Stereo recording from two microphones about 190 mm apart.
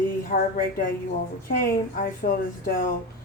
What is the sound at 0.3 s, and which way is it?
Speech, 45° left (ahead or behind).